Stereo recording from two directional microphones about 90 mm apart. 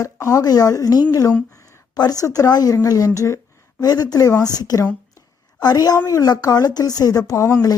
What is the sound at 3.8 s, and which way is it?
Speech, 45° left (ahead or behind).